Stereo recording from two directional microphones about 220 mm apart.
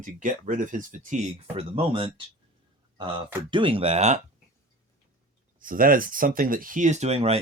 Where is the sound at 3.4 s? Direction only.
25° right (ahead or behind).